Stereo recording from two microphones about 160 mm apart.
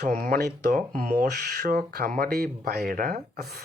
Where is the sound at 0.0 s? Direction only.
50° right (ahead or behind).